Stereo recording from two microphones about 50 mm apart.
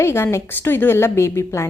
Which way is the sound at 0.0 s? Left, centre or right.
Left.